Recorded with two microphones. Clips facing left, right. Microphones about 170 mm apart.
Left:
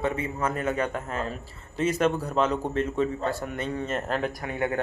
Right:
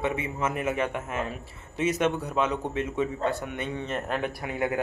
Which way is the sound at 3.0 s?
20° right (ahead or behind).